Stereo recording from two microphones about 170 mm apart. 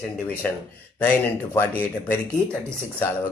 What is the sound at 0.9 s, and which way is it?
Speech, 15° left (ahead or behind).